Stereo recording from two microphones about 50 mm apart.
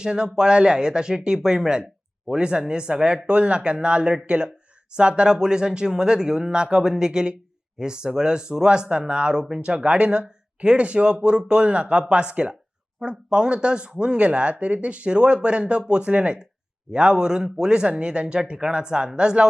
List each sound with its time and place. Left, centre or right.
0.0 s speech: centre